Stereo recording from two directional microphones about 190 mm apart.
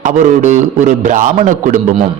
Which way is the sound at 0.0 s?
40° right (ahead or behind).